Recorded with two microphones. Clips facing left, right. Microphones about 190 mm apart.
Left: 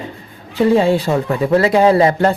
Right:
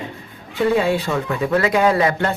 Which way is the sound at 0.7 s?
30° left (ahead or behind).